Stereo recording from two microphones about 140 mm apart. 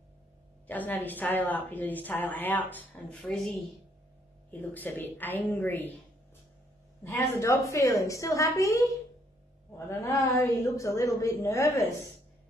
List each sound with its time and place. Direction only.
0.7 s a woman's voice: 15° left (ahead or behind)
7.0 s a woman's voice: 15° left (ahead or behind)